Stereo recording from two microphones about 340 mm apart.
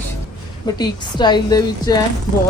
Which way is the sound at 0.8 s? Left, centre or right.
Centre.